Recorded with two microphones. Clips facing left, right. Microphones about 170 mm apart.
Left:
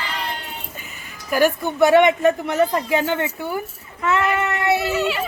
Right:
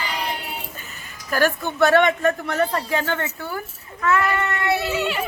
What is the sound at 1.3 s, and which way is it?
A child's voice, 15° left (ahead or behind).